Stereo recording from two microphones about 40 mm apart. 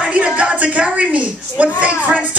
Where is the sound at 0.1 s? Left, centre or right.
Right.